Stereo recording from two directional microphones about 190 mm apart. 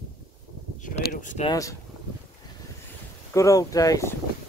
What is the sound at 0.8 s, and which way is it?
Speech, 45° left (ahead or behind).